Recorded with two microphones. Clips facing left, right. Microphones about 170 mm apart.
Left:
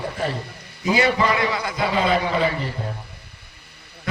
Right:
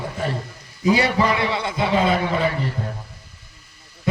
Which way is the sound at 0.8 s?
35° right (ahead or behind).